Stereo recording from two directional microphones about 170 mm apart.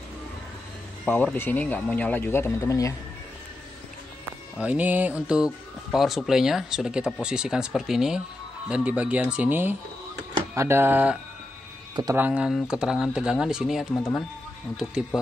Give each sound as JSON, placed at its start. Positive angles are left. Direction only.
{"t": 1.0, "sound": "speech", "side_deg": 10}
{"t": 4.6, "sound": "speech", "side_deg": -10}
{"t": 11.9, "sound": "speech", "side_deg": -25}
{"t": 12.2, "sound": "speech", "side_deg": -5}